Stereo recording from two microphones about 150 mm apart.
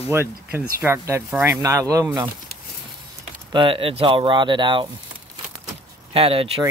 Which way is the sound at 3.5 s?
35° right (ahead or behind).